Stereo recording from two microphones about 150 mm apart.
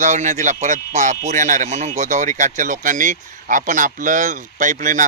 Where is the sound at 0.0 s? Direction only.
55° right (ahead or behind).